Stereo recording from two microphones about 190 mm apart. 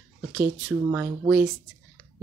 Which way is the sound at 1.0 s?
15° right (ahead or behind).